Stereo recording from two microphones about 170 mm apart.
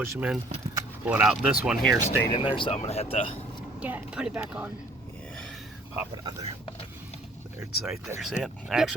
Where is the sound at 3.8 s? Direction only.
5° right (ahead or behind).